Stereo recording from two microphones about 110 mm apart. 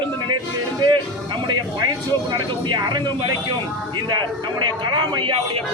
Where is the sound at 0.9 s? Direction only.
45° right (ahead or behind).